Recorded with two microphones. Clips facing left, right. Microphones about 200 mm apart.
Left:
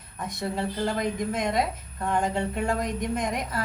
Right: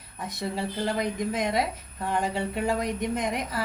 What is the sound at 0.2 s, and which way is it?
Speech, 55° left (ahead or behind).